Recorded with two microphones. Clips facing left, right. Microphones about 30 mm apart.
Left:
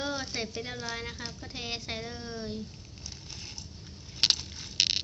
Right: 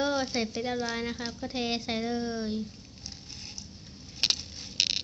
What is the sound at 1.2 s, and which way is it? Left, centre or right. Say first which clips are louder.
Speech: right 5 dB; right.